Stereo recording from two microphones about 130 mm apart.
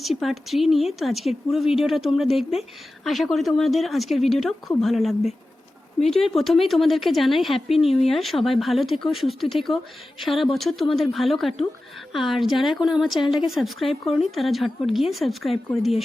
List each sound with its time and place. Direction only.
0.0 s a woman's voice: centre (ahead or behind)